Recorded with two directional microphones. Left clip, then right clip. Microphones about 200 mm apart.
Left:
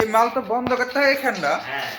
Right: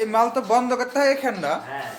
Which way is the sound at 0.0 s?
5° right (ahead or behind).